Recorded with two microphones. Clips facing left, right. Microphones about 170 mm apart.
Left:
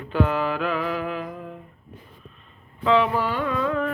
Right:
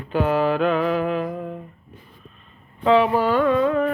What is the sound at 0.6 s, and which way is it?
Mantra, 30° right (ahead or behind).